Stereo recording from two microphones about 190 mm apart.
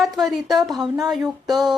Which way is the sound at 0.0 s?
Centre (ahead or behind).